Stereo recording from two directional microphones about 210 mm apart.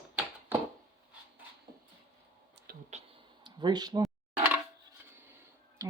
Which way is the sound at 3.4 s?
20° right (ahead or behind).